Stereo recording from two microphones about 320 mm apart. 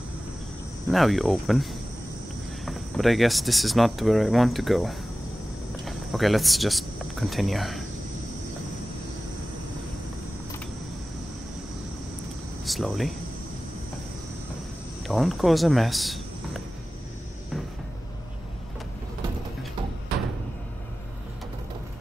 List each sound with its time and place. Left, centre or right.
0.8 s speech: centre
12.6 s speech: centre
15.0 s speech: centre